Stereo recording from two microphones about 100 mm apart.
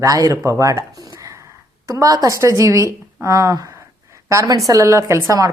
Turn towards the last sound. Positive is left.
turn(degrees=-35)  # may be behind; listen again after turning